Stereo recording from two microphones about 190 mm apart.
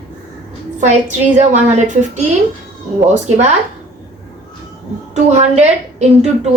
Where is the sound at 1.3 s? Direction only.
40° right (ahead or behind).